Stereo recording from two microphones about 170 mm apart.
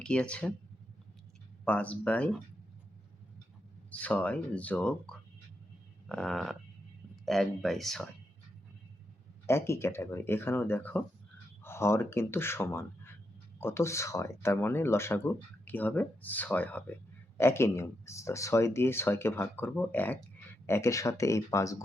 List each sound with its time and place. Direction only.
0.0 s speech: 5° left (ahead or behind)
1.6 s speech: 10° left (ahead or behind)
3.9 s speech: 10° left (ahead or behind)
9.5 s speech: 15° left (ahead or behind)